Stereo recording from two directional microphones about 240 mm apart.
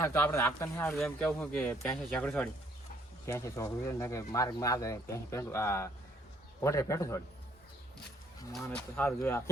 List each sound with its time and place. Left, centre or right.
0.0 s speech: centre
8.6 s speech: centre